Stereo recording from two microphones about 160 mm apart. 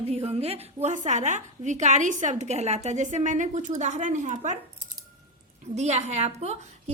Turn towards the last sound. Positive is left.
turn(degrees=-45)  # may be behind; listen again after turning